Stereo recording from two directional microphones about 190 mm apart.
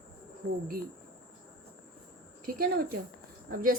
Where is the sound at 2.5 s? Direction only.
50° right (ahead or behind).